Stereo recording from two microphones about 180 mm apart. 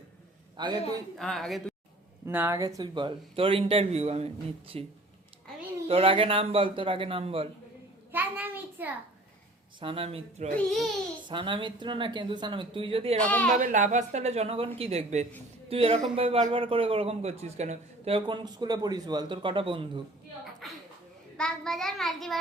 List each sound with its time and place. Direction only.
0.5 s a man's voice: 25° right (ahead or behind)
1.2 s a woman's voice: centre (ahead or behind)
2.2 s a man's voice: 10° right (ahead or behind); by 7.4 s 30° right (ahead or behind)
8.1 s a sound: 10° right (ahead or behind)
9.8 s a man's voice: 30° right (ahead or behind)
13.1 s speech: 5° left (ahead or behind)
13.6 s a man's voice: 45° right (ahead or behind); by 20.0 s 30° right (ahead or behind)
20.6 s a woman's voice: centre (ahead or behind)
21.3 s child singing: 5° left (ahead or behind)